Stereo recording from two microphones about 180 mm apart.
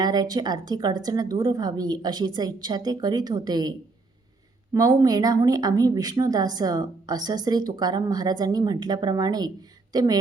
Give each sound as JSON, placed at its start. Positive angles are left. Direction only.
{"t": 0.0, "sound": "a woman's voice", "side_deg": -20}